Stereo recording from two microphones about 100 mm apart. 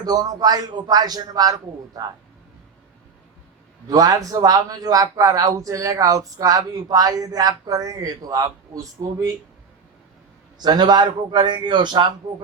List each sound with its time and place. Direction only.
0.0 s speech: 40° right (ahead or behind)
3.8 s speech: 35° right (ahead or behind)
10.6 s a man's voice: 45° right (ahead or behind)